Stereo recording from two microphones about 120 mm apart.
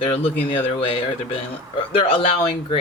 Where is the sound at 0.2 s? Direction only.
50° left (ahead or behind).